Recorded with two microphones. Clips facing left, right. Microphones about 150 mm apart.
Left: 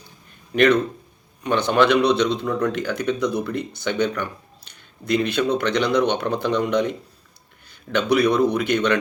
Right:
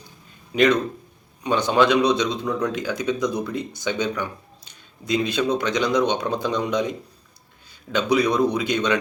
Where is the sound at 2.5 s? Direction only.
Centre (ahead or behind).